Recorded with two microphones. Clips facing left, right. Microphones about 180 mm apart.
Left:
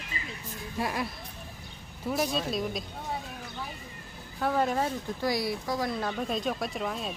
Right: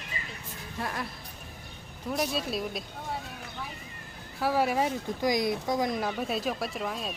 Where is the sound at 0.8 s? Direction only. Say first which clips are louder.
Left 3 dB; 10° left (ahead or behind).